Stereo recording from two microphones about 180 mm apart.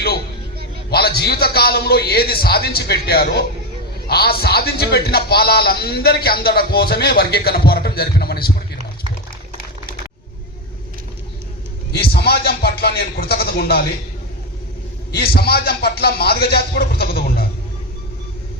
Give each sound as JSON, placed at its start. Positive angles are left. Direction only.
{"t": 0.9, "sound": "a man's voice", "side_deg": 60}
{"t": 11.9, "sound": "a man's voice", "side_deg": 60}
{"t": 15.1, "sound": "a man's voice", "side_deg": 60}